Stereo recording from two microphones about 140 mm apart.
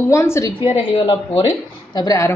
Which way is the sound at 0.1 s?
20° left (ahead or behind).